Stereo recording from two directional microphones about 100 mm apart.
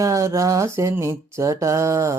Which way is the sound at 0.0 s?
35° right (ahead or behind).